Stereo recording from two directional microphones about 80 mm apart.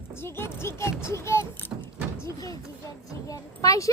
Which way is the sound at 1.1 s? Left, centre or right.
Left.